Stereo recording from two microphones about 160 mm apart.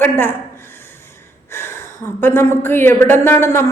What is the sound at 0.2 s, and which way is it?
A woman's voice, 15° left (ahead or behind).